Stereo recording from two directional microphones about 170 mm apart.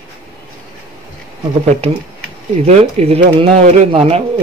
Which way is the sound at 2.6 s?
40° right (ahead or behind).